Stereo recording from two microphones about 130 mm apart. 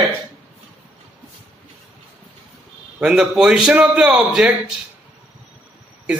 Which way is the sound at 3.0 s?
5° right (ahead or behind).